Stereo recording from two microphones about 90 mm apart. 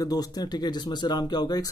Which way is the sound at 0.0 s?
45° left (ahead or behind).